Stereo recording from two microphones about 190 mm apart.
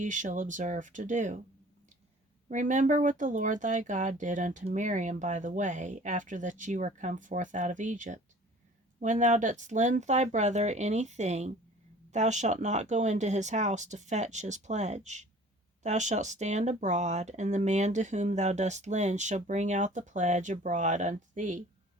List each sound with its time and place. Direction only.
0.0 s speech: 40° right (ahead or behind)
2.5 s speech: 40° right (ahead or behind)